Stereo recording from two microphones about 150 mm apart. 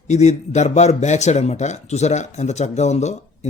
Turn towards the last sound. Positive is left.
turn(degrees=50)  # may be behind; listen again after turning